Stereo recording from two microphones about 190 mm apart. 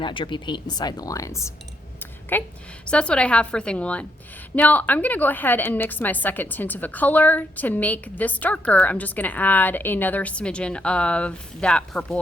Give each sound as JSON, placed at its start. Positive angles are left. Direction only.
{"t": 0.0, "sound": "a woman's voice", "side_deg": 25}